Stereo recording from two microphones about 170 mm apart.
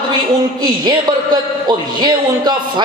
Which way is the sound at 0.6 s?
25° right (ahead or behind).